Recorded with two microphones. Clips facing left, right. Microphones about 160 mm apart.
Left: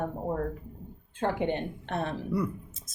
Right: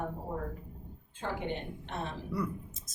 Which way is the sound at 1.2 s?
65° left (ahead or behind).